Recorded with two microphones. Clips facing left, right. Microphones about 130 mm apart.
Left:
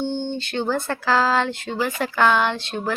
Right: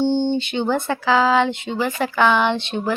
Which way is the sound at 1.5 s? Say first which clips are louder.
Right 2 dB; 20° right (ahead or behind).